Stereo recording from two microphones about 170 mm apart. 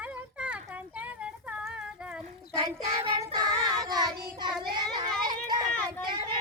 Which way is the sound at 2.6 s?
20° right (ahead or behind).